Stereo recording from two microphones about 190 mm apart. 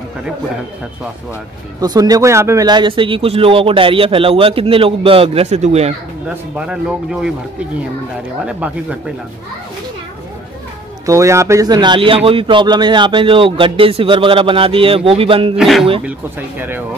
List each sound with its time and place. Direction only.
1.8 s speech: 20° right (ahead or behind)
6.2 s speech: 5° right (ahead or behind)
8.5 s speech: 5° right (ahead or behind)
11.1 s speech: 15° right (ahead or behind)
15.5 s speech: centre (ahead or behind)
16.1 s speech: 10° right (ahead or behind)